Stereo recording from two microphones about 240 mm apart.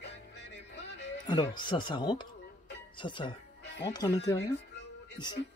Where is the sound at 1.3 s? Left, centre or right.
Centre.